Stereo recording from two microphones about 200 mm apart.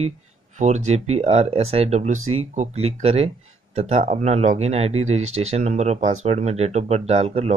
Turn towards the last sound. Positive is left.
turn(degrees=-30)  # may be behind; listen again after turning